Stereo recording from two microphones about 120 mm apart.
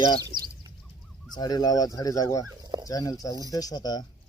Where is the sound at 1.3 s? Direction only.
35° left (ahead or behind).